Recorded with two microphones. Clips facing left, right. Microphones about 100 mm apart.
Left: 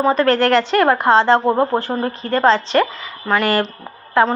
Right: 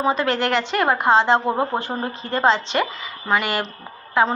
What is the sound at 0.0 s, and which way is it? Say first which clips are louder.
A woman's voice: left 6 dB; 10° right (ahead or behind).